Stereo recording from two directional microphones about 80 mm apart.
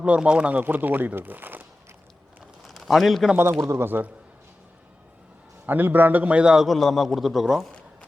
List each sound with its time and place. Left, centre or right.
0.0 s speech: centre
2.6 s speech: centre
3.6 s a man's voice: right
3.8 s speech: right
5.6 s speech: right
6.7 s a man's voice: centre